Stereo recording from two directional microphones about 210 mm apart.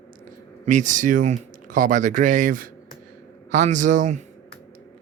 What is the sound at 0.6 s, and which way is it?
Speech, 35° right (ahead or behind).